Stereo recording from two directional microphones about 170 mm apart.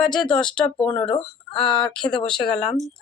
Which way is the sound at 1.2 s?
30° left (ahead or behind).